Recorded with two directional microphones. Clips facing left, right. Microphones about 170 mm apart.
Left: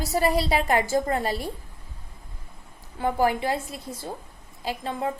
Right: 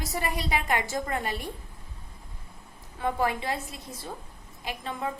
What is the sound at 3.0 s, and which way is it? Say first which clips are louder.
A woman's voice: left 5 dB; 30° left (ahead or behind).